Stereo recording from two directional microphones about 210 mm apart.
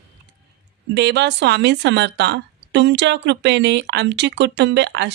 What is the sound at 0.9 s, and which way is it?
A woman's voice, 55° right (ahead or behind).